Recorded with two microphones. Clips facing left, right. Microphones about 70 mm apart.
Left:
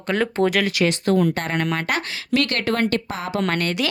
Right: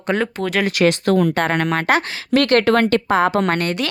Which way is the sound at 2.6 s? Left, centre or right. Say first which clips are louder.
Right 6 dB; right.